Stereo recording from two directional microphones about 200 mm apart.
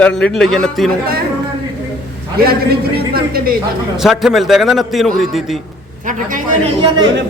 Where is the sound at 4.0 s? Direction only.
Centre (ahead or behind).